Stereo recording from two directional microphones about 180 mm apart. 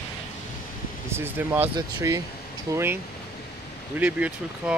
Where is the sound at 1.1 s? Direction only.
10° right (ahead or behind).